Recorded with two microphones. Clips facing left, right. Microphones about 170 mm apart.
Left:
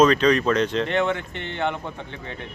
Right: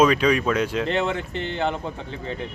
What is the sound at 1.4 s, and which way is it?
Speech, 35° right (ahead or behind).